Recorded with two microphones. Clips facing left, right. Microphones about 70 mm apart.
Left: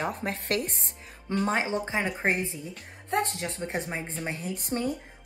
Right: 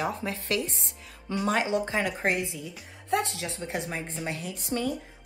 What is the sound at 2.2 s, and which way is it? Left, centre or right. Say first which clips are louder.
A woman's voice: even; left.